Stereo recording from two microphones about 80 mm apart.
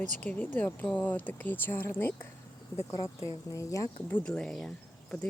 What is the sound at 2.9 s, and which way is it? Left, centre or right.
Speech, left.